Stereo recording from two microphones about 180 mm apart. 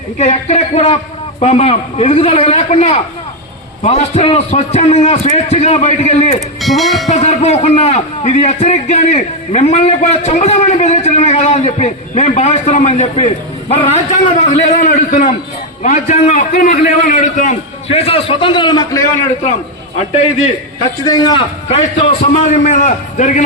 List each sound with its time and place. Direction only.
0.2 s a man's voice: 40° left (ahead or behind)
6.6 s speech: centre (ahead or behind)
7.1 s a man's voice: 40° left (ahead or behind); by 19.0 s 20° left (ahead or behind)
21.1 s a man's voice: 20° left (ahead or behind); by 23.4 s 45° left (ahead or behind)